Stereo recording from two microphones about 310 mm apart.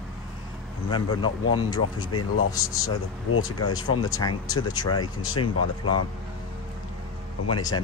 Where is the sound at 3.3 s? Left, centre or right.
Left.